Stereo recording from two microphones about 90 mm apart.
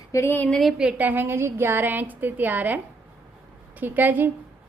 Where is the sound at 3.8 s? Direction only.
20° right (ahead or behind).